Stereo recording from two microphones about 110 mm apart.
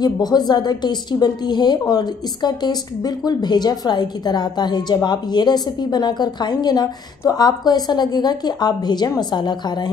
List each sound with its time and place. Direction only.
0.0 s a woman's voice: 40° left (ahead or behind)